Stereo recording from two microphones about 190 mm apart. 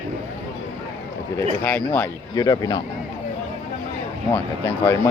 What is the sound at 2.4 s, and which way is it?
Speech, 20° left (ahead or behind).